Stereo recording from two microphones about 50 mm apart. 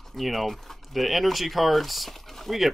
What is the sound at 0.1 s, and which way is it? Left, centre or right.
Speech, centre.